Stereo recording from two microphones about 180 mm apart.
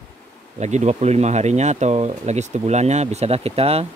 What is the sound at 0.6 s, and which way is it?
Speech, 40° right (ahead or behind).